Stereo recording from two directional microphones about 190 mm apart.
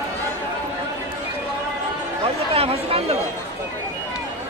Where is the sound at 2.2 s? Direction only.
30° right (ahead or behind).